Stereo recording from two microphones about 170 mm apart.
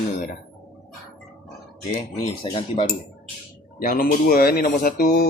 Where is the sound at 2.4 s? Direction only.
30° left (ahead or behind).